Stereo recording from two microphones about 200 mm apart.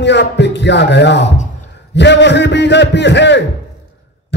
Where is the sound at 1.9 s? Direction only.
60° left (ahead or behind).